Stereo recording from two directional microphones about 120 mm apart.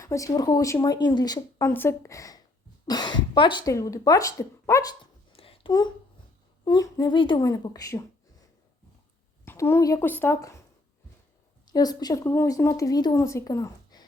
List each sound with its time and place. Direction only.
0.0 s a woman's voice: 25° left (ahead or behind)
3.7 s speech: 25° left (ahead or behind)
5.3 s a sound: 50° left (ahead or behind)
6.7 s a woman's voice: 30° left (ahead or behind)
7.1 s a woman's voice: 40° left (ahead or behind)
9.4 s a woman's voice: 20° left (ahead or behind)
11.6 s speech: 35° left (ahead or behind)